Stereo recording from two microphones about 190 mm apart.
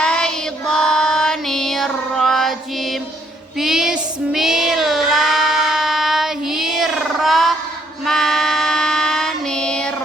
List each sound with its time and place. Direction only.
0.0 s child singing: 5° left (ahead or behind)